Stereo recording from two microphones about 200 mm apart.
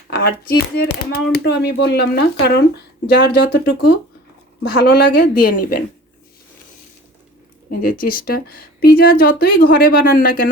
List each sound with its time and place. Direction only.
0.1 s a woman's voice: 50° left (ahead or behind)
7.7 s a woman's voice: 45° left (ahead or behind)